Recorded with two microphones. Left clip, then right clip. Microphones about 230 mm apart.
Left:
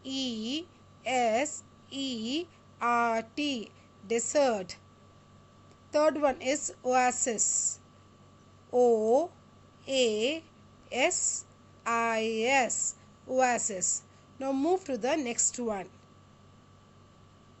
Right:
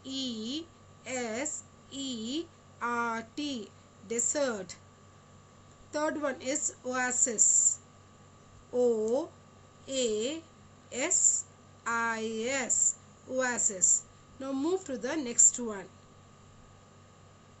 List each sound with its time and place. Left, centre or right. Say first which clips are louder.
0.1 s a sound: left 2 dB; left
4.1 s a woman's voice: left 5 dB; left
5.9 s a woman's voice: left 6 dB; left